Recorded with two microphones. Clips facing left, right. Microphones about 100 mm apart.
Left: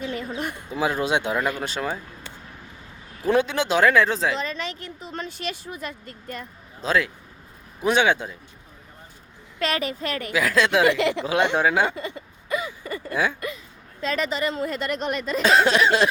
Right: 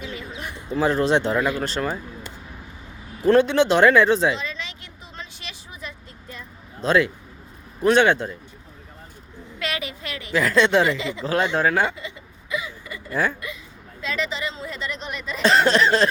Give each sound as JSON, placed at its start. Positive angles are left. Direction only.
{"t": 0.0, "sound": "a sound", "side_deg": 50}
{"t": 0.7, "sound": "speech", "side_deg": 10}
{"t": 3.2, "sound": "speech", "side_deg": 5}
{"t": 4.4, "sound": "a sound", "side_deg": 45}
{"t": 6.8, "sound": "speech", "side_deg": 0}
{"t": 9.6, "sound": "a woman's voice", "side_deg": 40}
{"t": 10.3, "sound": "speech", "side_deg": 5}
{"t": 10.8, "sound": "speech", "side_deg": 65}
{"t": 11.5, "sound": "speech", "side_deg": 15}
{"t": 11.9, "sound": "a sound", "side_deg": 50}
{"t": 14.0, "sound": "a woman's voice", "side_deg": 45}
{"t": 15.4, "sound": "speech", "side_deg": 10}